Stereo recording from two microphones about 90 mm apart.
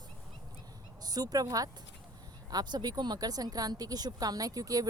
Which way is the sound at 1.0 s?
45° right (ahead or behind).